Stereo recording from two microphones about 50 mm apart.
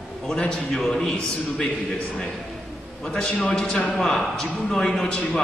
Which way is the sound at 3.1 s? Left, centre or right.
Centre.